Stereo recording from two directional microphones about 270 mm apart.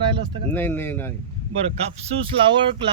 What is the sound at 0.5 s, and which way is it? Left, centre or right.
Speech, centre.